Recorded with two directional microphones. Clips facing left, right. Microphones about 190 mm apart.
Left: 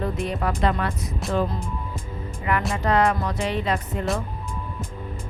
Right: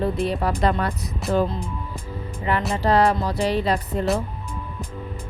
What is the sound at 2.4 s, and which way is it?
Speech, 30° right (ahead or behind).